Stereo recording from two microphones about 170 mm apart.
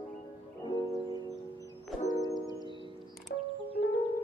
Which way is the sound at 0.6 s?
25° left (ahead or behind).